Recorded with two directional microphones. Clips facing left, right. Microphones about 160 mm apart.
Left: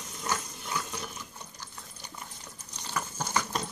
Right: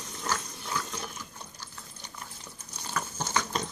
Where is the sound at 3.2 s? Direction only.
5° left (ahead or behind).